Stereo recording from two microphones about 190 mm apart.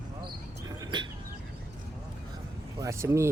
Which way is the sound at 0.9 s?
25° right (ahead or behind).